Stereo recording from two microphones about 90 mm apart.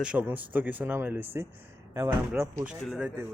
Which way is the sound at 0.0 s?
15° right (ahead or behind).